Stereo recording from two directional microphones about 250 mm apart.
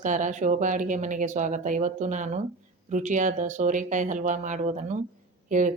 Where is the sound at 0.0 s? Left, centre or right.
Right.